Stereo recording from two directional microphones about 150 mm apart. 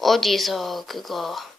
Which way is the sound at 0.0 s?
Centre (ahead or behind).